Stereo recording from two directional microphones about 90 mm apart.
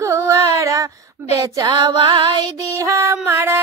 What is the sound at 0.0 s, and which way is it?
Female singing, 35° right (ahead or behind).